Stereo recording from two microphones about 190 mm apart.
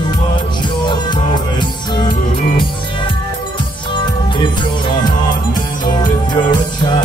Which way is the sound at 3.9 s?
25° left (ahead or behind).